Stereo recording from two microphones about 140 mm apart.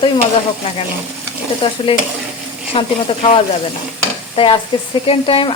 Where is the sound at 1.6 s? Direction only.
40° left (ahead or behind).